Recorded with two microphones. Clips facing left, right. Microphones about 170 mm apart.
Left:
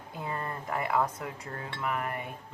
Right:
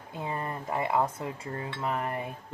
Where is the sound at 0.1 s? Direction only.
20° right (ahead or behind).